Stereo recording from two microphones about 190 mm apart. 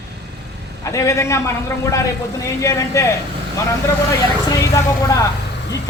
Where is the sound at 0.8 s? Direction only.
15° left (ahead or behind).